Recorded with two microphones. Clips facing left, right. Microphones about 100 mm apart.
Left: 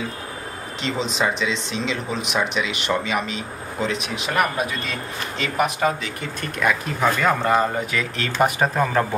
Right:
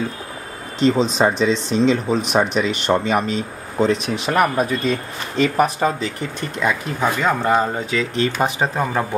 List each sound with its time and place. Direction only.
0.7 s speech: 40° right (ahead or behind); by 9.0 s 20° right (ahead or behind)